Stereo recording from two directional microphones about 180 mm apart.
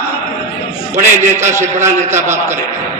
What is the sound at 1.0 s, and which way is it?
A man's voice, 15° right (ahead or behind).